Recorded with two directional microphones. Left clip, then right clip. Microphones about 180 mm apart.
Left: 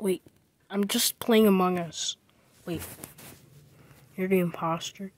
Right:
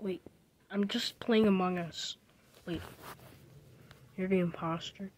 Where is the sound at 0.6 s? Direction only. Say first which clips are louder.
Left 7 dB; 20° left (ahead or behind).